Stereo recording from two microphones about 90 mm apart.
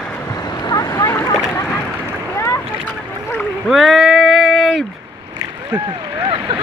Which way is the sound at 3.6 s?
Centre (ahead or behind).